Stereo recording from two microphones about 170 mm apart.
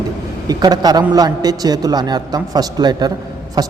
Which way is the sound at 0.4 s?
25° right (ahead or behind).